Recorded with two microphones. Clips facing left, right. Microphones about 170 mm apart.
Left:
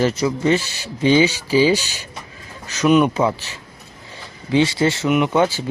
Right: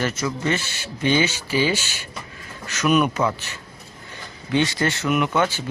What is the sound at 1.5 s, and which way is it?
Speech, 35° left (ahead or behind).